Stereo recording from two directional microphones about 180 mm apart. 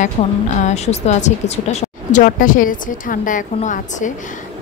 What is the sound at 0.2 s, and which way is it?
A woman's voice, 40° left (ahead or behind).